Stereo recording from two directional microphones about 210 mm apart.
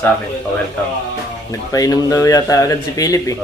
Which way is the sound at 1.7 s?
15° left (ahead or behind).